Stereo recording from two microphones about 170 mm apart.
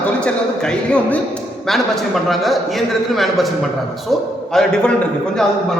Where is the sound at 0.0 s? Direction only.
5° left (ahead or behind).